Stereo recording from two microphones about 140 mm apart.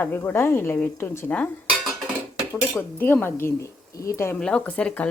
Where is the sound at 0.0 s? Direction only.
15° left (ahead or behind).